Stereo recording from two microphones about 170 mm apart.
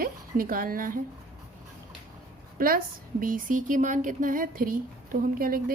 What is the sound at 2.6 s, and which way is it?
A woman's voice, 55° right (ahead or behind).